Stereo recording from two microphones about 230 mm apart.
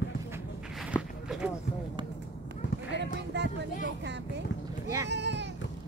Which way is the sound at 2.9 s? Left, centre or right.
Right.